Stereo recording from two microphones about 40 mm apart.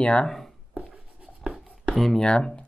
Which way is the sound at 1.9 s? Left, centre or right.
Centre.